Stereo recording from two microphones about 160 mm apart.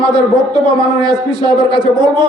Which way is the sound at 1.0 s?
25° right (ahead or behind).